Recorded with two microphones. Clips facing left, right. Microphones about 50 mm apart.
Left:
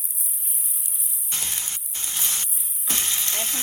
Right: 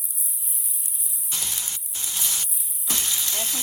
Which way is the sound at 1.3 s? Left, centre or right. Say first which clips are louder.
Even; left.